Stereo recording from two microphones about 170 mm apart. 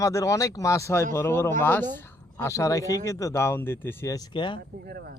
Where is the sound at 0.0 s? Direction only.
20° left (ahead or behind).